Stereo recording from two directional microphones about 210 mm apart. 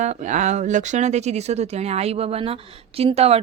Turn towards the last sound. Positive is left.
turn(degrees=-30)  # may be behind; listen again after turning